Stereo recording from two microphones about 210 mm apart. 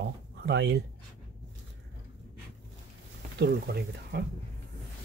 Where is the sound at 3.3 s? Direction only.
50° right (ahead or behind).